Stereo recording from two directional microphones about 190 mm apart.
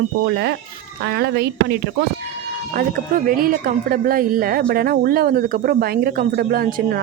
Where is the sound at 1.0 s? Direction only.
55° right (ahead or behind).